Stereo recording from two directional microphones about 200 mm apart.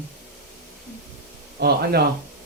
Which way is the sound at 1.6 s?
55° right (ahead or behind).